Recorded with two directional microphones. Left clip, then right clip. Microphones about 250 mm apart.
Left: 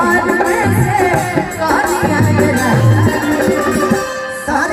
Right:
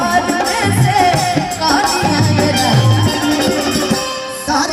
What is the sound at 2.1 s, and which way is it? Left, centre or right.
Music, right.